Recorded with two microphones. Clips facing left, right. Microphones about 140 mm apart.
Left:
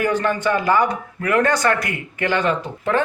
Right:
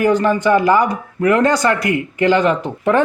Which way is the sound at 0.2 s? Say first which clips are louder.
Right 6 dB; 15° right (ahead or behind).